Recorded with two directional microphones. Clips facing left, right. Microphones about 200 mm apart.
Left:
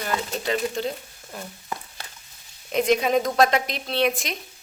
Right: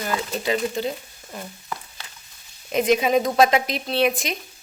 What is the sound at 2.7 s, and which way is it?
Speech, centre (ahead or behind).